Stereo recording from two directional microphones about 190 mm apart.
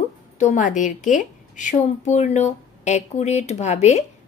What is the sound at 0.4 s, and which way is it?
A woman's voice, 40° left (ahead or behind).